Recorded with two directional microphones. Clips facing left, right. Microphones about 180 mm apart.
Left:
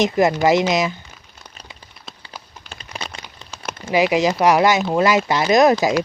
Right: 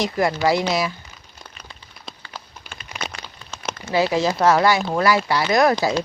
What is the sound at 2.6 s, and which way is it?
Crumpling, 35° left (ahead or behind).